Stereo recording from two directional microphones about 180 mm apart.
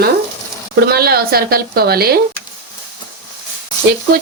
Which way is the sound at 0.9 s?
60° right (ahead or behind).